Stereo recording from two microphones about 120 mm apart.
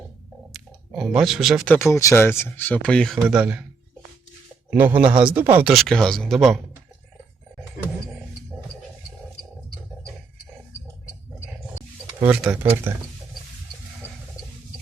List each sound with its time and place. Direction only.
0.9 s speech: centre (ahead or behind)
1.6 s speech: 15° left (ahead or behind)
1.9 s speech: 25° left (ahead or behind); by 3.2 s 5° left (ahead or behind)
3.2 s speech: 10° right (ahead or behind)
4.7 s speech: 15° right (ahead or behind)
5.7 s speech: 5° left (ahead or behind)
12.2 s speech: 10° right (ahead or behind)